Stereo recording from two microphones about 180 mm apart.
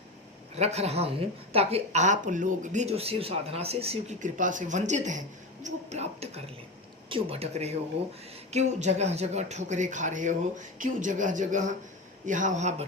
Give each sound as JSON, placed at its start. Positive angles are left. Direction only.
{"t": 0.5, "sound": "speech", "side_deg": -35}